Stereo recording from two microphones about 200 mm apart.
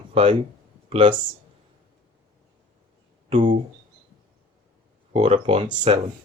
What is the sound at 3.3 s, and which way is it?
Speech, 25° right (ahead or behind).